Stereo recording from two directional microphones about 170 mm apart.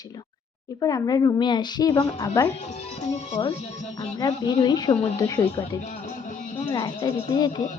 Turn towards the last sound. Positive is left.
turn(degrees=25)  # may be behind; listen again after turning